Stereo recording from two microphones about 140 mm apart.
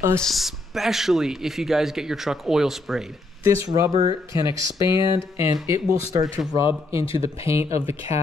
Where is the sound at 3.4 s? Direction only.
20° right (ahead or behind).